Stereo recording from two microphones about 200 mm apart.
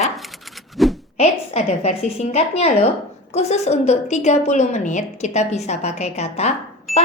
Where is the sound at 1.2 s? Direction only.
35° left (ahead or behind).